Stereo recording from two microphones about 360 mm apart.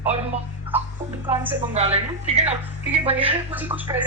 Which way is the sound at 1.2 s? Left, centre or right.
Centre.